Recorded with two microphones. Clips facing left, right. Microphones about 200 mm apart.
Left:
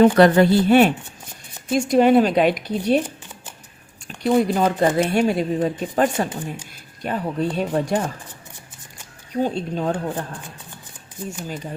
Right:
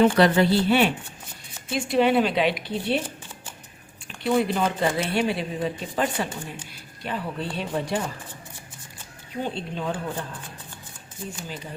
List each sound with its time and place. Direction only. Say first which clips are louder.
0.0 s speech: left 5 dB; 50° left (ahead or behind)
4.2 s speech: left 5 dB; 40° left (ahead or behind)
9.3 s speech: left 7 dB; 40° left (ahead or behind)